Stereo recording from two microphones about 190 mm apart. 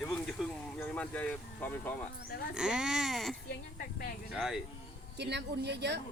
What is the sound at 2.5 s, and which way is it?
Speech, 5° right (ahead or behind).